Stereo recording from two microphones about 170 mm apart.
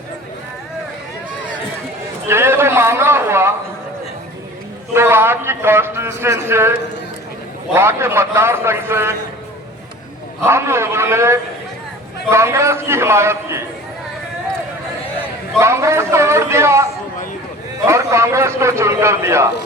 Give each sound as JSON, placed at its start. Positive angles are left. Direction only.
{"t": 2.2, "sound": "a sound", "side_deg": -15}
{"t": 4.9, "sound": "a man's voice", "side_deg": -15}
{"t": 10.4, "sound": "a man's voice", "side_deg": -15}
{"t": 15.5, "sound": "a man's voice", "side_deg": -15}
{"t": 17.8, "sound": "a man's voice", "side_deg": -15}